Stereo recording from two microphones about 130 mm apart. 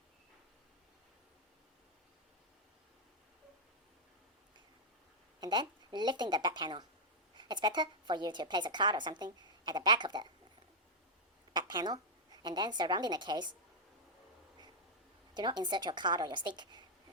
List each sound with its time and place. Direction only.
5.4 s a woman's voice: 35° right (ahead or behind)
11.5 s a woman's voice: 35° right (ahead or behind)
15.4 s a woman's voice: 35° right (ahead or behind)